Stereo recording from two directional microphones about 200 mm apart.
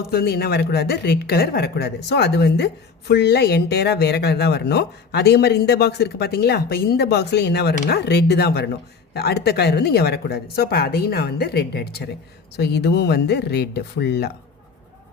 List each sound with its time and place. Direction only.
0.1 s speech: 50° left (ahead or behind)